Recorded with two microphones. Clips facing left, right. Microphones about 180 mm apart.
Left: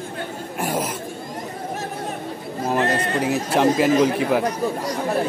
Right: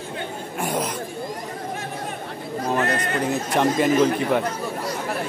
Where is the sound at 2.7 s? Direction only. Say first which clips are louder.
Left 2 dB; 30° left (ahead or behind).